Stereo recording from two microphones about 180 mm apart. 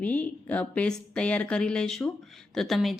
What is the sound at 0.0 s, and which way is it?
A woman's voice, 10° left (ahead or behind).